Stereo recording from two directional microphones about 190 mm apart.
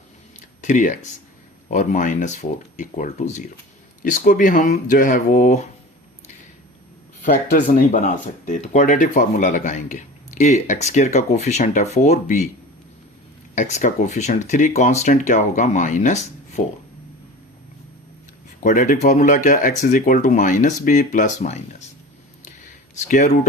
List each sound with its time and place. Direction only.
0.6 s speech: 40° left (ahead or behind)
7.2 s speech: 45° left (ahead or behind)
13.6 s speech: 40° left (ahead or behind)
18.6 s speech: 45° left (ahead or behind)
22.4 s a sound: 40° left (ahead or behind)